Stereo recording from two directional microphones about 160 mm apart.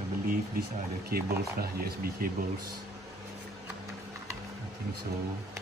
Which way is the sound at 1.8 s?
70° right (ahead or behind).